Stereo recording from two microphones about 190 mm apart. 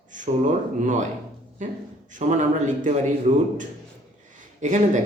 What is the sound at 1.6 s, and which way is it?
Speech, 40° right (ahead or behind).